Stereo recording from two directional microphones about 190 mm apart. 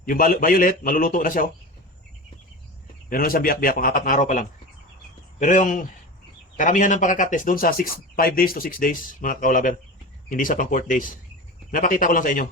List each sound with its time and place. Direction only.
0.1 s speech: 45° left (ahead or behind)
3.1 s speech: 50° left (ahead or behind)